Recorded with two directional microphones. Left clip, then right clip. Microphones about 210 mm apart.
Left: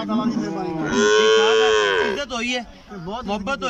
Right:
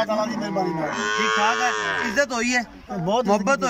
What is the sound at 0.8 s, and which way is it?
Cattle, 50° left (ahead or behind).